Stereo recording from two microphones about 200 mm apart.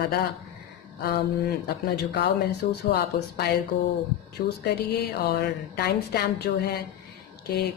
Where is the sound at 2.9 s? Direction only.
55° left (ahead or behind).